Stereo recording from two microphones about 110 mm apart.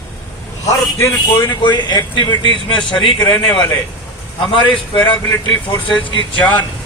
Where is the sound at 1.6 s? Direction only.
45° left (ahead or behind).